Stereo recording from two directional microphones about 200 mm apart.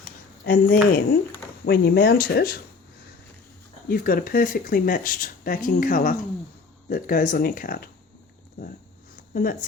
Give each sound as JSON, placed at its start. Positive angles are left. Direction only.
{"t": 0.4, "sound": "speech", "side_deg": 45}
{"t": 3.8, "sound": "speech", "side_deg": 45}
{"t": 9.3, "sound": "speech", "side_deg": 45}